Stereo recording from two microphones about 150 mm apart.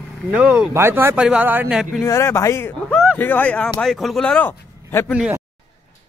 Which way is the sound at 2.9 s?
Centre (ahead or behind).